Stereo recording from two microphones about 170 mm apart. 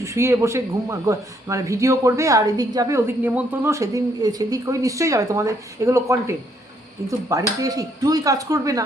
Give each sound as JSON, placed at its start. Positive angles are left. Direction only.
{"t": 0.0, "sound": "speech", "side_deg": -15}